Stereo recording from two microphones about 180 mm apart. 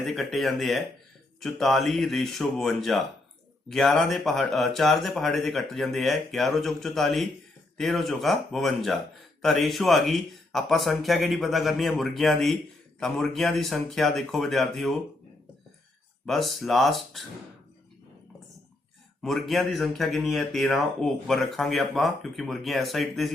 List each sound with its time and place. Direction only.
0.0 s a man's voice: centre (ahead or behind)
16.2 s a man's voice: centre (ahead or behind)
19.2 s a man's voice: centre (ahead or behind)